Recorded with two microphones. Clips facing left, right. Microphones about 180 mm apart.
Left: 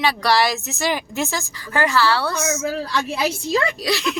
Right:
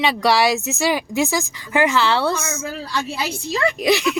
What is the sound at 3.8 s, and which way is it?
Speech, 15° right (ahead or behind).